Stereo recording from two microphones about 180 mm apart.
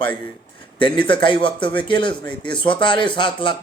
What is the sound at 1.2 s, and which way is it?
Speech, 25° left (ahead or behind).